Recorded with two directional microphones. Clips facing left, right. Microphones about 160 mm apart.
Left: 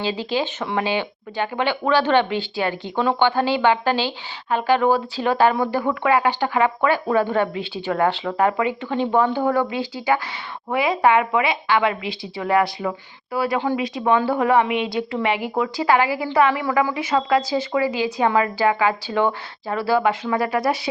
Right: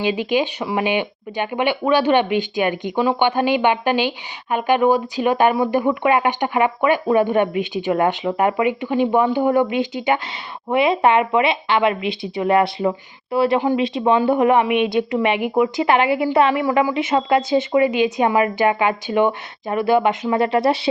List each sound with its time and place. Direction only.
0.0 s speech: 15° right (ahead or behind)
3.2 s a woman's voice: 15° right (ahead or behind)